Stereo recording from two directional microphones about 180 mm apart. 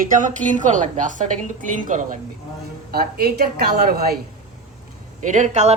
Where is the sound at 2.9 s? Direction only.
60° right (ahead or behind).